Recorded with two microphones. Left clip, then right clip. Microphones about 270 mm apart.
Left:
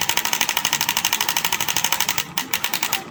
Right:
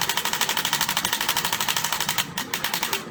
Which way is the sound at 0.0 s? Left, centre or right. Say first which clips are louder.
Left 3 dB; left.